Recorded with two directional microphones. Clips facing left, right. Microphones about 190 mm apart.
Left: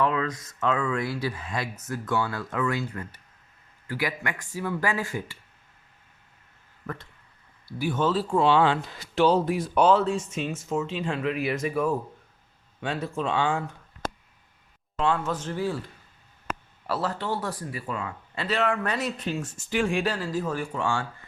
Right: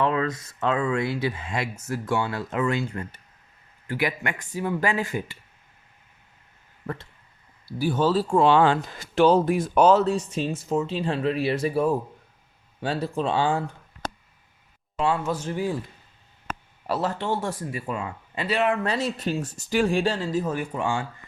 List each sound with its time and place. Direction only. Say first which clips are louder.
0.0 s speech: right 2 dB; 35° right (ahead or behind)
7.8 s speech: right 3 dB; 35° right (ahead or behind)
14.9 s speech: right 1 dB; 10° right (ahead or behind)
16.8 s speech: right 3 dB; 20° right (ahead or behind)